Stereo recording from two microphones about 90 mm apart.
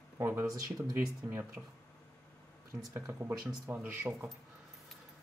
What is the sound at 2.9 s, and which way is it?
Speech, 25° right (ahead or behind).